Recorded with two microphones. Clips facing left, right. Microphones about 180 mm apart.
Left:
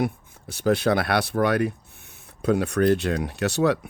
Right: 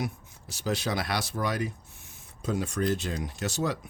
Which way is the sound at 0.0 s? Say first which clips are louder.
Left 8 dB; 55° left (ahead or behind).